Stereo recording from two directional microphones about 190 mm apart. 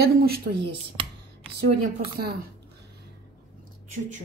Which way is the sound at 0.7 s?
30° right (ahead or behind).